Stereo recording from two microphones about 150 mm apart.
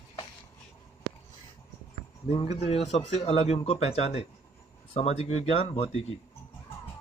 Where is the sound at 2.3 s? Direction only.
40° left (ahead or behind).